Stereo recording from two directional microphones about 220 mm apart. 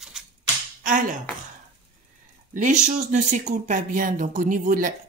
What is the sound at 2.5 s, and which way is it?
Speech, 35° right (ahead or behind).